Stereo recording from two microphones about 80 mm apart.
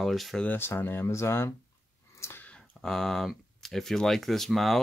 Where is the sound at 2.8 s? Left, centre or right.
Centre.